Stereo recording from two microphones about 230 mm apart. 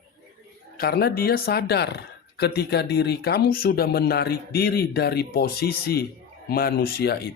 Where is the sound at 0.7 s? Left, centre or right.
Left.